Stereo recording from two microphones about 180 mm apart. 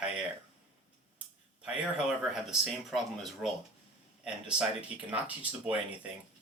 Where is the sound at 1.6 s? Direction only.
5° right (ahead or behind).